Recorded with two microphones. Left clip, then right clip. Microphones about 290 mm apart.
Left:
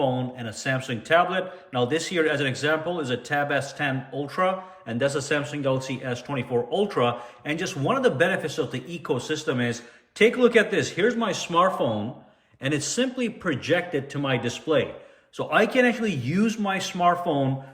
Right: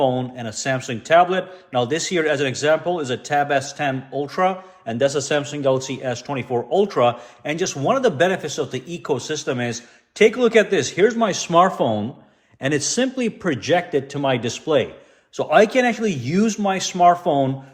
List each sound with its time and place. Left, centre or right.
0.0 s a man's voice: centre